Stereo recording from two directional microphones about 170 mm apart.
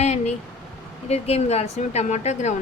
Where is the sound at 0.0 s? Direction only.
40° left (ahead or behind).